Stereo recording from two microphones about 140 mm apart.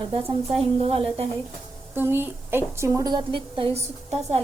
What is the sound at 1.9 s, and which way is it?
A woman's voice, 15° right (ahead or behind).